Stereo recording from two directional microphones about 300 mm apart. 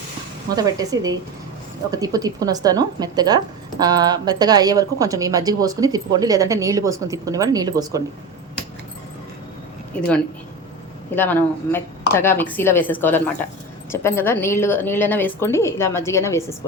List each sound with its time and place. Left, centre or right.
0.5 s a woman's voice: centre
10.0 s a woman's voice: centre